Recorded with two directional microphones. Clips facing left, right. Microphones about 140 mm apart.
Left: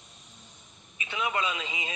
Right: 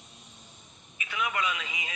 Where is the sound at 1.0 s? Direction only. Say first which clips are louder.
Left 1 dB; 25° left (ahead or behind).